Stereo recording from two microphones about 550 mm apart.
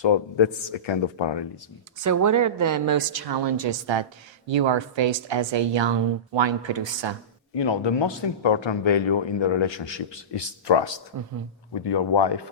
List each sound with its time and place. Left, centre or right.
0.0 s speech: left
2.0 s a woman's voice: right
7.5 s speech: left